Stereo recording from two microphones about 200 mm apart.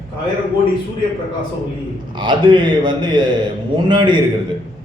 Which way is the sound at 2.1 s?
25° right (ahead or behind).